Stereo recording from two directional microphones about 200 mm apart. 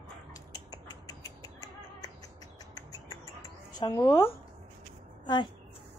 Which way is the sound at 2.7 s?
20° left (ahead or behind).